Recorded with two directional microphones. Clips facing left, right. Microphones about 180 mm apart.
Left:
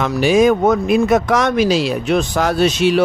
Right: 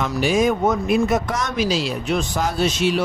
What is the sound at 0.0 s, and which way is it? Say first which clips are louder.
Speech: left 6 dB; 80° left.